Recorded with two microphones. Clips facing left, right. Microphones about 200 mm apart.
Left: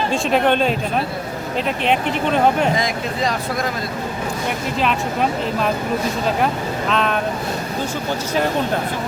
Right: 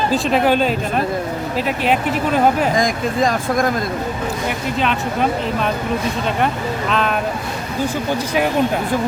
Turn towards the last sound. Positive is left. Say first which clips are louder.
# right 1 dB
turn(degrees=0)  # may be behind; listen again after turning